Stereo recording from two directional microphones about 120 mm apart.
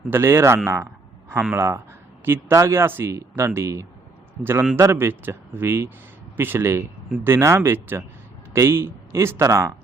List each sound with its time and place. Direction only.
0.1 s speech: 20° right (ahead or behind)
4.4 s a man's voice: centre (ahead or behind)
4.8 s speech: 20° right (ahead or behind)